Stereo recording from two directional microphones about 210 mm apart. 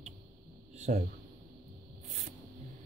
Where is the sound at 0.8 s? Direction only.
40° right (ahead or behind).